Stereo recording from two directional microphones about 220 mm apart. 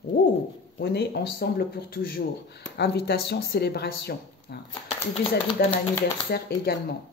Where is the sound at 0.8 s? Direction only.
45° left (ahead or behind).